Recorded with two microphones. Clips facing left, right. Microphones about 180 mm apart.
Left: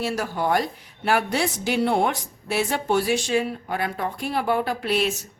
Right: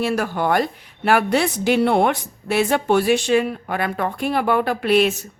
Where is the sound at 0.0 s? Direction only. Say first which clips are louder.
Right 4 dB; 60° right (ahead or behind).